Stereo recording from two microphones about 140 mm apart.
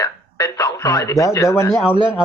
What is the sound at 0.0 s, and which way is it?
Radio, 25° left (ahead or behind).